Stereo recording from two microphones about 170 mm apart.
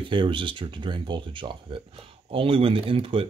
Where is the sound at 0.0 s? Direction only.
30° right (ahead or behind).